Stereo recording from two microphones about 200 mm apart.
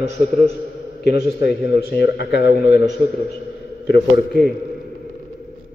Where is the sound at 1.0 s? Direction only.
55° left (ahead or behind).